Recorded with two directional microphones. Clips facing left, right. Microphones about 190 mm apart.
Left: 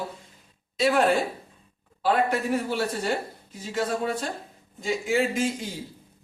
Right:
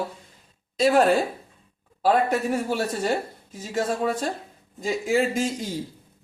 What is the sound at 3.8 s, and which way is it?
A man's voice, 45° right (ahead or behind).